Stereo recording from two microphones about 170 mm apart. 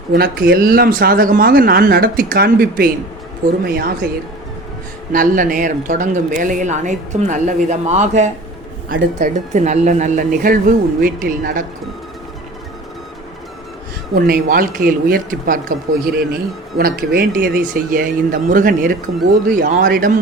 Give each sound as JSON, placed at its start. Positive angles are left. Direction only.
{"t": 0.1, "sound": "speech", "side_deg": -65}
{"t": 5.1, "sound": "speech", "side_deg": -55}
{"t": 10.3, "sound": "speech", "side_deg": -55}
{"t": 14.2, "sound": "speech", "side_deg": -60}
{"t": 16.7, "sound": "speech", "side_deg": -60}